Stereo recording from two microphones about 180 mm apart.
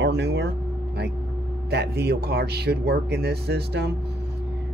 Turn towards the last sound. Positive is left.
turn(degrees=-65)  # may be behind; listen again after turning